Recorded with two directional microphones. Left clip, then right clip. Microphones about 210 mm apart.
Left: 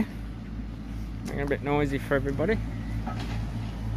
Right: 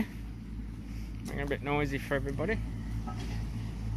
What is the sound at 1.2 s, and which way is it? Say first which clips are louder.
Speech: left 5 dB; 5° left (ahead or behind).